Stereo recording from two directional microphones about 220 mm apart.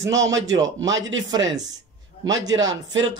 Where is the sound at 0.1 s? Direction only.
55° right (ahead or behind).